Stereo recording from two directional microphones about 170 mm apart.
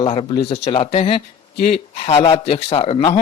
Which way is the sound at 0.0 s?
35° left (ahead or behind).